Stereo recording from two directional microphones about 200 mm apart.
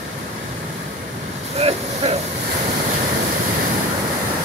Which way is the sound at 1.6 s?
30° right (ahead or behind).